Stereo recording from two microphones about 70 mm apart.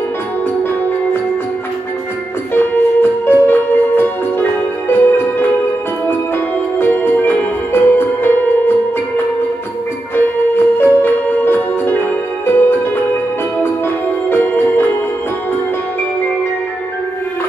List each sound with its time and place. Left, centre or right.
2.5 s music: left
6.8 s music: left
14.3 s music: left